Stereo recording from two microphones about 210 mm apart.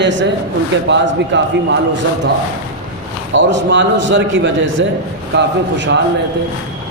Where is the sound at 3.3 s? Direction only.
60° right (ahead or behind).